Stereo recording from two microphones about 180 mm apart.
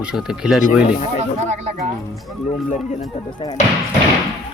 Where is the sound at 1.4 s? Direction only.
40° right (ahead or behind).